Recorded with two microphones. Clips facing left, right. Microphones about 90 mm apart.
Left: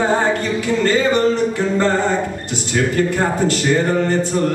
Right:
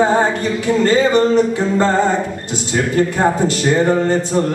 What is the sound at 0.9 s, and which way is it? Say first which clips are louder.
A man's voice: right 2 dB; 20° right (ahead or behind).